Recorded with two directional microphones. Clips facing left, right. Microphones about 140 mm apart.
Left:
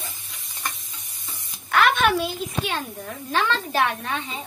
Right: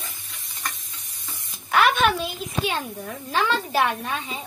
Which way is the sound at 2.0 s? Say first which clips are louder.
Left 1 dB; centre (ahead or behind).